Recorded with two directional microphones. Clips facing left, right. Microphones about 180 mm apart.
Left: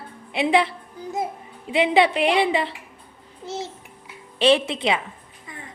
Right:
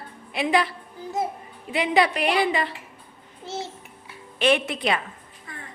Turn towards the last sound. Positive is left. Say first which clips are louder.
# left 3 dB
turn(degrees=25)  # may be behind; listen again after turning